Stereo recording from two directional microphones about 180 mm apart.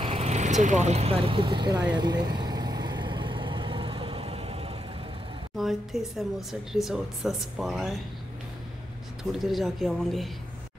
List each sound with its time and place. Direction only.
0.0 s vehicle: 35° right (ahead or behind)
5.6 s speech: centre (ahead or behind)
9.2 s speech: centre (ahead or behind)